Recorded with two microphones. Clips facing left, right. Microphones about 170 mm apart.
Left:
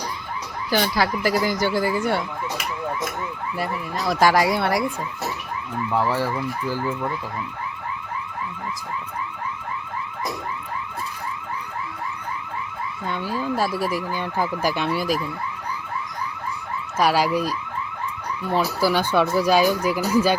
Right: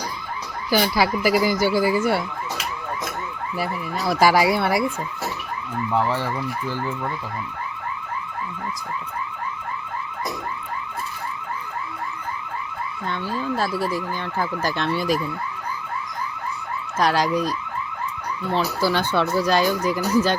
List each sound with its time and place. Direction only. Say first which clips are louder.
0.7 s speech: right 2 dB; 5° right (ahead or behind)
3.6 s speech: right 1 dB; centre (ahead or behind)
13.1 s speech: left 1 dB; 10° left (ahead or behind)
17.0 s speech: left 1 dB; 10° left (ahead or behind)
18.5 s speech: left 1 dB; 10° left (ahead or behind)